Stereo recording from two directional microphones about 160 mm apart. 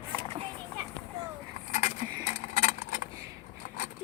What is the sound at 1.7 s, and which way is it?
Keys jangling, 45° left (ahead or behind).